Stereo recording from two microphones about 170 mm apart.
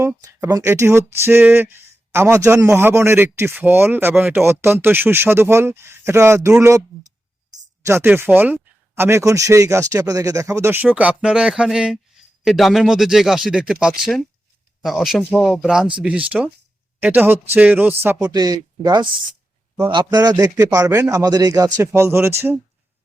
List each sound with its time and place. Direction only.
0.4 s speech: 15° right (ahead or behind)